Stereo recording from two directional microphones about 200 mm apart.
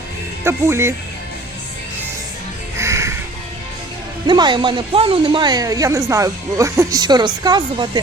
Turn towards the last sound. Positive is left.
turn(degrees=-20)  # may be behind; listen again after turning